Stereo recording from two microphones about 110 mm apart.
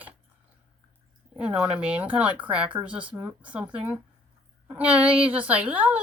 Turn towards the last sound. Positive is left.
turn(degrees=-15)  # may be behind; listen again after turning